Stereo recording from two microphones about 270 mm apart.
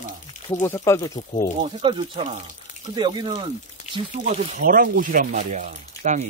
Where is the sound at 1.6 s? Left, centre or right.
Centre.